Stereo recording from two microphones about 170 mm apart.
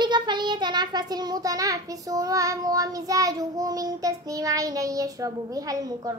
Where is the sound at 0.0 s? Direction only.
25° right (ahead or behind).